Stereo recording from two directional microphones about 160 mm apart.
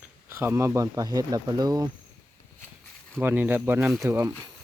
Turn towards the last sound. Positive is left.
turn(degrees=-15)  # may be behind; listen again after turning